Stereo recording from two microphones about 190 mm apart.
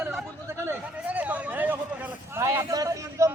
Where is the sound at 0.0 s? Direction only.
10° right (ahead or behind).